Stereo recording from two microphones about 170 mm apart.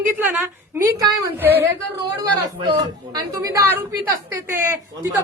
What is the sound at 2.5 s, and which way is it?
A woman's voice, 25° right (ahead or behind).